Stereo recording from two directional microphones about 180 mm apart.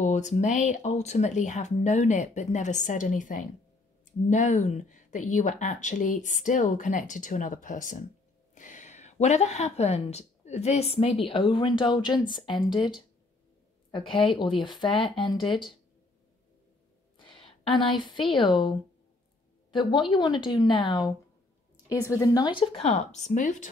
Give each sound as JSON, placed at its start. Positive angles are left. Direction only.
{"t": 0.0, "sound": "a woman's voice", "side_deg": 40}
{"t": 13.9, "sound": "a woman's voice", "side_deg": 30}
{"t": 17.2, "sound": "a woman's voice", "side_deg": 30}
{"t": 19.7, "sound": "a woman's voice", "side_deg": 25}
{"t": 23.3, "sound": "speech", "side_deg": 45}